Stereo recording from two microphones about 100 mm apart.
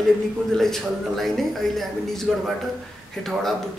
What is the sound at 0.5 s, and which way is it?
A man's voice, 5° left (ahead or behind).